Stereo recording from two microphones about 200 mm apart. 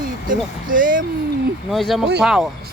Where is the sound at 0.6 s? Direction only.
45° right (ahead or behind).